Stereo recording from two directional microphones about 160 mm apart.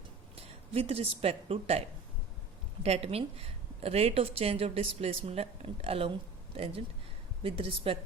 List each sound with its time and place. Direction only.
0.3 s a sound: 40° right (ahead or behind)
1.2 s speech: 40° right (ahead or behind)
2.8 s speech: 40° right (ahead or behind)
7.4 s speech: 35° right (ahead or behind)